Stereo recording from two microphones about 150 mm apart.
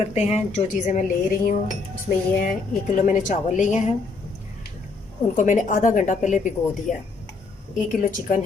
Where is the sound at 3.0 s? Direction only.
60° left (ahead or behind).